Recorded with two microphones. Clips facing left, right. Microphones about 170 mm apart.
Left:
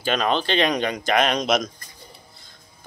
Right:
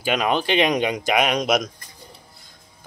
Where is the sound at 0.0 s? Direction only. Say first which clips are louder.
Right 1 dB; 10° right (ahead or behind).